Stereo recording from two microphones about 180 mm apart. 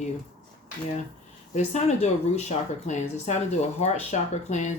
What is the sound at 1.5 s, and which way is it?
Speech, 40° left (ahead or behind).